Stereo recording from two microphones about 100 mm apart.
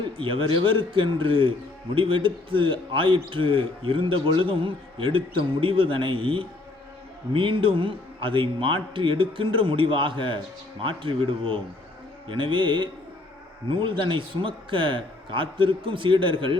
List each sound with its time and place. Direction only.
0.0 s a man's voice: 60° right (ahead or behind)